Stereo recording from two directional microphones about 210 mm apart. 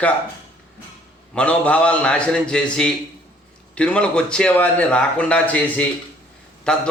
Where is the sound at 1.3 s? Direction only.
5° left (ahead or behind).